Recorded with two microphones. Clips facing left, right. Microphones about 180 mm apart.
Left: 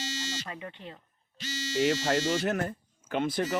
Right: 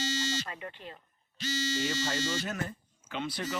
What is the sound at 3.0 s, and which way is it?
Speech, 50° left (ahead or behind).